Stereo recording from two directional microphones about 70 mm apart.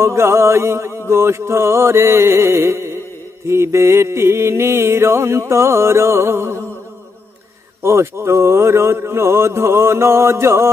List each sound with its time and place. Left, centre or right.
0.0 s music: right
7.8 s music: right